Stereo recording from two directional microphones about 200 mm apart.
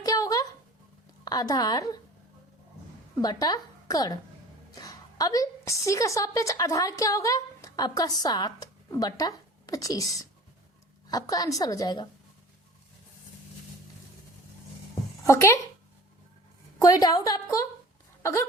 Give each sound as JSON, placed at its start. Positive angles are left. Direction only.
{"t": 0.0, "sound": "a sound", "side_deg": 15}
{"t": 1.2, "sound": "a woman's voice", "side_deg": 20}
{"t": 3.2, "sound": "a woman's voice", "side_deg": 20}
{"t": 15.2, "sound": "speech", "side_deg": 15}
{"t": 16.8, "sound": "a woman's voice", "side_deg": 20}